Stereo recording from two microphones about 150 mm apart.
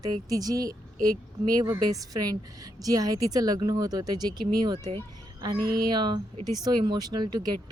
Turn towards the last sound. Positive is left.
turn(degrees=-25)  # may be behind; listen again after turning